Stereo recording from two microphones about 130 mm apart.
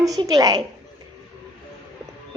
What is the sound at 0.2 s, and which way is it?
Speech, 30° right (ahead or behind).